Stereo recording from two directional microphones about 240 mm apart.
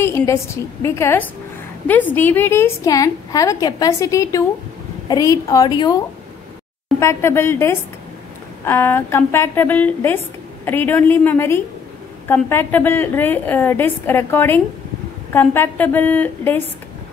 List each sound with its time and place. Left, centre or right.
0.0 s a woman's voice: centre
7.0 s a woman's voice: centre